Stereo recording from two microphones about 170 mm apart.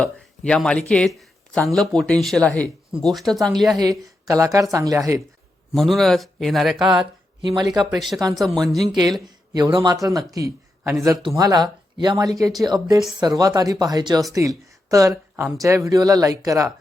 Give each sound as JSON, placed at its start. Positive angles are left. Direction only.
{"t": 0.0, "sound": "speech", "side_deg": 5}
{"t": 3.8, "sound": "a man's voice", "side_deg": -20}
{"t": 5.7, "sound": "speech", "side_deg": 0}
{"t": 7.4, "sound": "a man's voice", "side_deg": -25}
{"t": 7.9, "sound": "speech", "side_deg": 0}
{"t": 9.5, "sound": "a man's voice", "side_deg": -25}